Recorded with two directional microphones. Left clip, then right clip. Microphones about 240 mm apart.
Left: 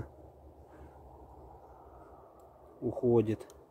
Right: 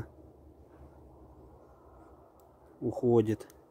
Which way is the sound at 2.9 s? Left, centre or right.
Right.